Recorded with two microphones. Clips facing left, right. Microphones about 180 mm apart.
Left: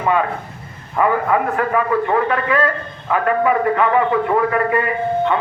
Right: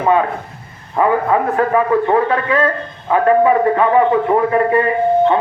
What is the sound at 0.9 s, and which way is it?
A man's voice, 25° right (ahead or behind).